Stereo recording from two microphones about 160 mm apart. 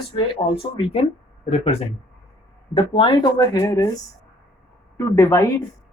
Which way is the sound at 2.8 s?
30° left (ahead or behind).